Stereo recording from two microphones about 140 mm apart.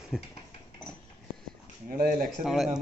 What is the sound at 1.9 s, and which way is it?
Speech, 90° right.